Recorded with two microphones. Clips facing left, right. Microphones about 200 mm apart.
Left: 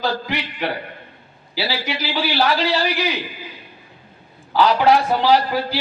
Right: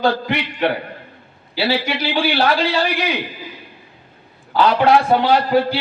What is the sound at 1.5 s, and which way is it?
A man's voice, 60° right (ahead or behind).